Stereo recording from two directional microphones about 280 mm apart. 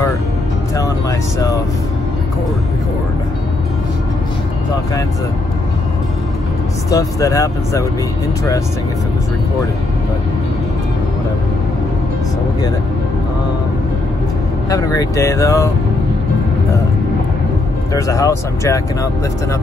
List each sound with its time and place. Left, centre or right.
6.9 s speech: centre
14.7 s speech: centre
17.9 s speech: centre